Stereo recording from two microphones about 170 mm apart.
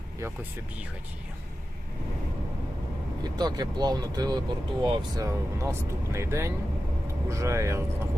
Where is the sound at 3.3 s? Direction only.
25° right (ahead or behind).